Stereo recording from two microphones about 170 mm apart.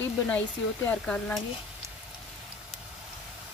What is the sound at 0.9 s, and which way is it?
Speech, 5° left (ahead or behind).